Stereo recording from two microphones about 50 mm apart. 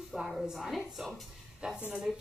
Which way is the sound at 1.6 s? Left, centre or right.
Centre.